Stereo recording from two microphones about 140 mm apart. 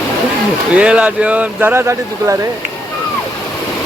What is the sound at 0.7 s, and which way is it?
Speech, 5° right (ahead or behind).